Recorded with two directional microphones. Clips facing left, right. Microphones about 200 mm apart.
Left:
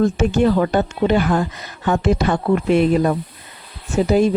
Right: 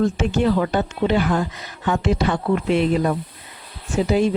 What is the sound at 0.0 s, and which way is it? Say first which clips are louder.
A woman's voice: left 3 dB; 45° left (ahead or behind).